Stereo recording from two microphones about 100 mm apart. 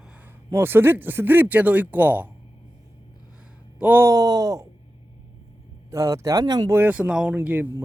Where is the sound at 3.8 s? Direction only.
15° right (ahead or behind).